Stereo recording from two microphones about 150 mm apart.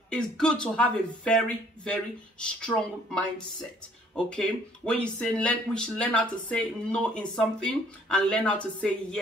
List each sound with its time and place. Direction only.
0.1 s speech: 5° left (ahead or behind)
2.4 s speech: 5° left (ahead or behind)
4.3 s speech: 5° left (ahead or behind)